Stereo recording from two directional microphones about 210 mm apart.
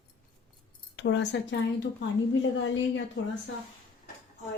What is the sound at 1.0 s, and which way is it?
Speech, 60° left (ahead or behind).